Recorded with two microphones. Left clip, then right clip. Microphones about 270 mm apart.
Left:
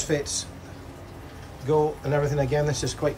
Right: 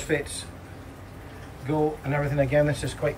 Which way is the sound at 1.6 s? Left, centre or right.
Centre.